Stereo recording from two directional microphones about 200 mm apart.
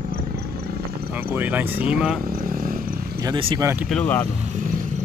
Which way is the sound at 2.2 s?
45° right (ahead or behind).